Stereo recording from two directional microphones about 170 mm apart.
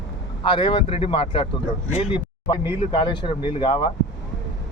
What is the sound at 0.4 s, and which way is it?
Speech, 30° left (ahead or behind).